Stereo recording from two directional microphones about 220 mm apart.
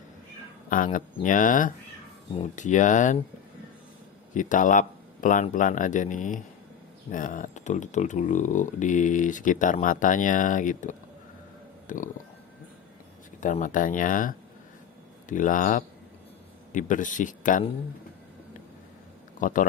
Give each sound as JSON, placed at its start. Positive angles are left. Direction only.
{"t": 0.7, "sound": "speech", "side_deg": 40}
{"t": 4.4, "sound": "speech", "side_deg": 35}
{"t": 13.4, "sound": "speech", "side_deg": 35}
{"t": 19.4, "sound": "speech", "side_deg": 35}